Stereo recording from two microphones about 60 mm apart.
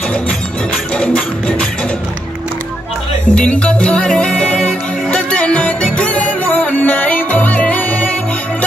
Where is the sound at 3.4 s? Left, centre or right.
Centre.